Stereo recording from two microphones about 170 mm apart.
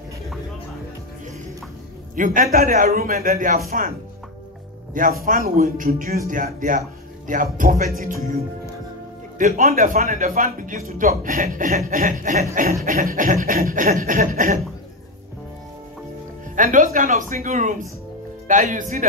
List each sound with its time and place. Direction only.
2.1 s a man's voice: 50° right (ahead or behind)
5.2 s a man's voice: 60° right (ahead or behind)
9.4 s a man's voice: 50° right (ahead or behind)
16.5 s a man's voice: 50° right (ahead or behind)